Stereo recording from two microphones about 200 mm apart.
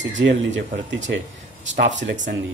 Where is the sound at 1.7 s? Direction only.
65° right (ahead or behind).